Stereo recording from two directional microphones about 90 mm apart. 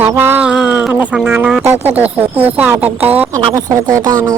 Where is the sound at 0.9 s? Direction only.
20° right (ahead or behind).